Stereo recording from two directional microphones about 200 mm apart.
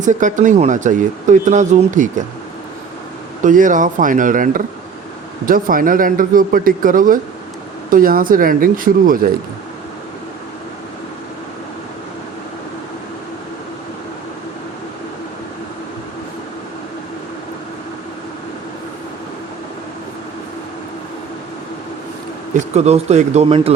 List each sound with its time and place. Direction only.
0.0 s speech: 40° right (ahead or behind)
3.4 s a man's voice: 40° right (ahead or behind)
22.5 s speech: 35° right (ahead or behind)